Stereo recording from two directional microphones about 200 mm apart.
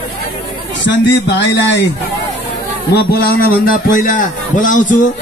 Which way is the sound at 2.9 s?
50° left (ahead or behind).